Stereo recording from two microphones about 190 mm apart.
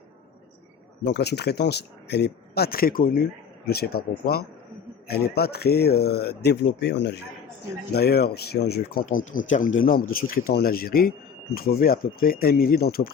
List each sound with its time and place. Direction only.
1.0 s speech: 60° left (ahead or behind)
5.0 s speech: 55° left (ahead or behind)